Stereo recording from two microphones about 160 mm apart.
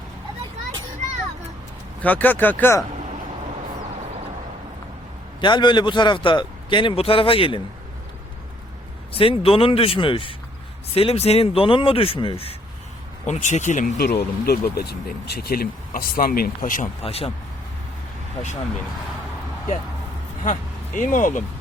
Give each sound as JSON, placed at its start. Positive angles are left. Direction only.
{"t": 2.0, "sound": "speech", "side_deg": 10}
{"t": 5.4, "sound": "a man's voice", "side_deg": 30}
{"t": 9.1, "sound": "a man's voice", "side_deg": 35}
{"t": 13.2, "sound": "speech", "side_deg": 50}
{"t": 14.0, "sound": "speech", "side_deg": 90}
{"t": 17.0, "sound": "a man's voice", "side_deg": 40}
{"t": 20.4, "sound": "speech", "side_deg": 55}